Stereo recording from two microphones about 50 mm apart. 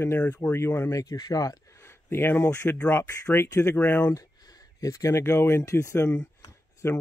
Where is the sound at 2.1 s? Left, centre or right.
Left.